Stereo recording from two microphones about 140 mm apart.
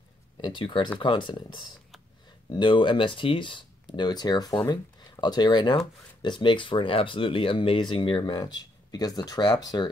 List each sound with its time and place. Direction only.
0.4 s speech: 35° left (ahead or behind)